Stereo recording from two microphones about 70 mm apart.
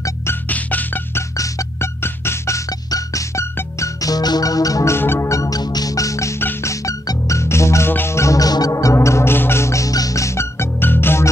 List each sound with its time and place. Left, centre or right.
0.0 s music: left
0.5 s music: left
1.3 s music: left
2.0 s music: left
2.9 s music: left
4.9 s music: left
5.3 s music: left
5.6 s music: left
7.9 s music: left
8.2 s music: left